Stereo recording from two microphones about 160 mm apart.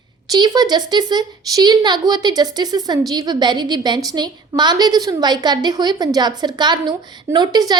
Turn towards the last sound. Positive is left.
turn(degrees=-25)  # may be behind; listen again after turning